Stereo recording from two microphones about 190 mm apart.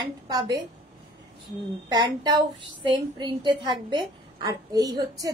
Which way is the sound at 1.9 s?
20° right (ahead or behind).